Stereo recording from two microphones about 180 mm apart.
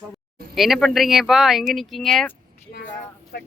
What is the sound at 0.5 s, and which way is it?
Speech, centre (ahead or behind).